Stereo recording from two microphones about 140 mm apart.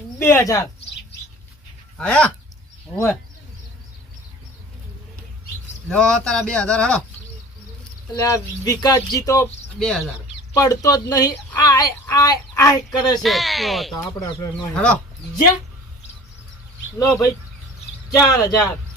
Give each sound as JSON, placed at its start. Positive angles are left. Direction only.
{"t": 0.2, "sound": "speech", "side_deg": 20}
{"t": 2.0, "sound": "speech", "side_deg": 5}
{"t": 5.9, "sound": "speech", "side_deg": 5}
{"t": 8.1, "sound": "speech", "side_deg": 25}
{"t": 9.7, "sound": "speech", "side_deg": 5}
{"t": 10.5, "sound": "speech", "side_deg": 25}
{"t": 13.1, "sound": "speech", "side_deg": 0}
{"t": 14.0, "sound": "speech", "side_deg": 25}
{"t": 14.7, "sound": "speech", "side_deg": 5}
{"t": 17.0, "sound": "speech", "side_deg": 20}